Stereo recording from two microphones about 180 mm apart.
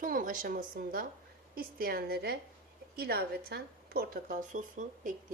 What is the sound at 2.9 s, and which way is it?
Speech, 60° right (ahead or behind).